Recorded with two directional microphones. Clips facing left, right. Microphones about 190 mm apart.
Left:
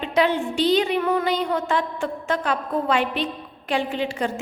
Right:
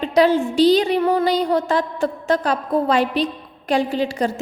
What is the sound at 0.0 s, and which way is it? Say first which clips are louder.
A woman's voice: right 5 dB; 40° right (ahead or behind).